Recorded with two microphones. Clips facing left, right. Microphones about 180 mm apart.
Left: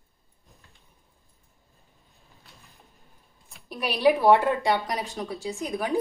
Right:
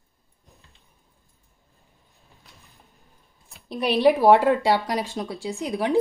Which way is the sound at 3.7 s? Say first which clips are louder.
Right 3 dB; 25° right (ahead or behind).